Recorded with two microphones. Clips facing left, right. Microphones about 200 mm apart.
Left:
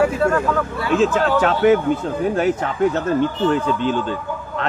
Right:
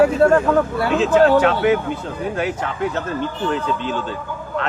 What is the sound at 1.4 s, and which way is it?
A man's voice, 40° left (ahead or behind).